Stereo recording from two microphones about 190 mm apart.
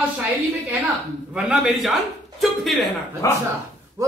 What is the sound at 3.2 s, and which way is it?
Speech, 15° left (ahead or behind).